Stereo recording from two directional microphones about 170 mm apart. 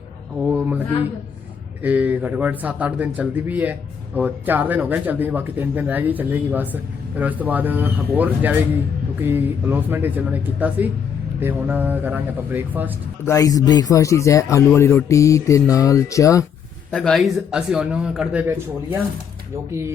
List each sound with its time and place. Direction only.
0.3 s speech: 5° right (ahead or behind)
1.8 s speech: 10° right (ahead or behind)
13.2 s speech: 20° left (ahead or behind)
14.8 s mantra: 15° left (ahead or behind)
15.7 s speech: 20° left (ahead or behind)
16.9 s speech: 5° left (ahead or behind)